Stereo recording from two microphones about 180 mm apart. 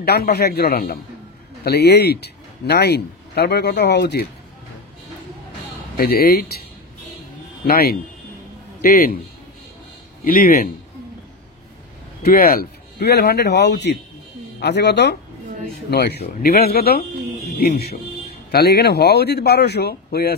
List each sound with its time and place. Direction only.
0.0 s a man's voice: 65° left (ahead or behind)
5.9 s speech: 55° left (ahead or behind)
7.6 s speech: 55° left (ahead or behind)
10.2 s speech: 50° left (ahead or behind)
12.2 s speech: 55° left (ahead or behind)